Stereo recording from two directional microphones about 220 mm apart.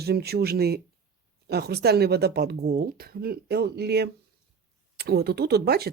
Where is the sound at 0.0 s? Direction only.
45° right (ahead or behind).